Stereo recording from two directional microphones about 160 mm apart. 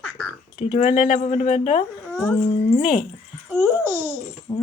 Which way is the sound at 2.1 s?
10° left (ahead or behind).